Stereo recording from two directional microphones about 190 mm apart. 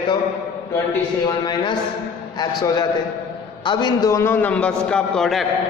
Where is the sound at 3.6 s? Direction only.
25° left (ahead or behind); by 5.5 s centre (ahead or behind).